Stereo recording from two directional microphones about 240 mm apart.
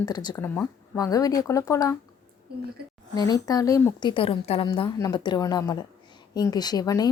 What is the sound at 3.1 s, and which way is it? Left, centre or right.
A woman's voice, centre.